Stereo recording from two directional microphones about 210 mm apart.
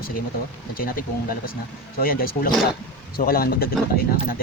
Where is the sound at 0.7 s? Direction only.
45° left (ahead or behind).